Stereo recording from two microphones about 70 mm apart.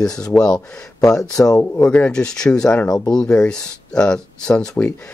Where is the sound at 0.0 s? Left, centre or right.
Centre.